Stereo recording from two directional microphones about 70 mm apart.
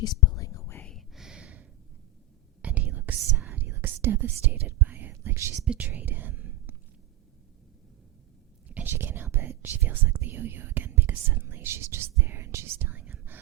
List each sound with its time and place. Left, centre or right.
0.0 s whispering: left
0.8 s a sound: centre
2.6 s whispering: centre
5.1 s speech: right
5.6 s speech: right
8.9 s speech: right
13.0 s whispering: right